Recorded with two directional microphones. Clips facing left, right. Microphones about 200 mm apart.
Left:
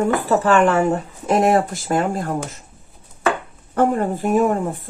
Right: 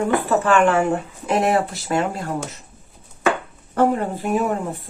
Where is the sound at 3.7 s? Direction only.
50° left (ahead or behind).